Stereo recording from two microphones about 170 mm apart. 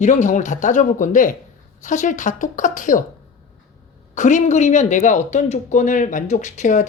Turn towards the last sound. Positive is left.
turn(degrees=45)  # may be behind; listen again after turning